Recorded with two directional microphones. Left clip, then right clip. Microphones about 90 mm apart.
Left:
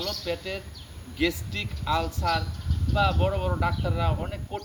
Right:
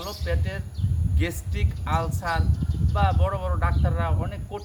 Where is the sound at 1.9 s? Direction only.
25° right (ahead or behind).